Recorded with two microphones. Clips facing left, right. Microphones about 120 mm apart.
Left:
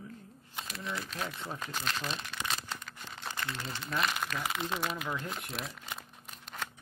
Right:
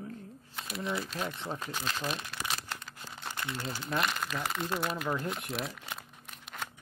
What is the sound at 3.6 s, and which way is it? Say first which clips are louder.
Speech: right 2 dB; centre (ahead or behind).